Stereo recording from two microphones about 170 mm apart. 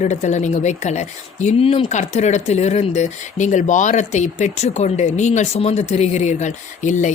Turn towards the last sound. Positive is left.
turn(degrees=45)  # may be behind; listen again after turning